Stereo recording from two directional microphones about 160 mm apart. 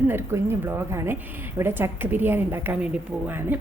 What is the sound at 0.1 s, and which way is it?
Speech, 15° right (ahead or behind).